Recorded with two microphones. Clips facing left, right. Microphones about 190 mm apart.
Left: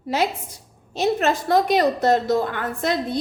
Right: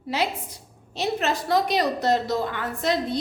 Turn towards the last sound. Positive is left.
turn(degrees=50)  # may be behind; listen again after turning